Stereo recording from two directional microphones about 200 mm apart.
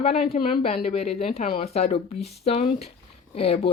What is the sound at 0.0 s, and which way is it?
A woman's voice, 30° left (ahead or behind).